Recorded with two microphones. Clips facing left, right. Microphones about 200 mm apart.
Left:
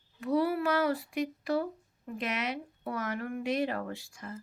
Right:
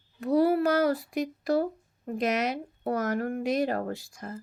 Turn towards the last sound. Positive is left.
turn(degrees=-40)  # may be behind; listen again after turning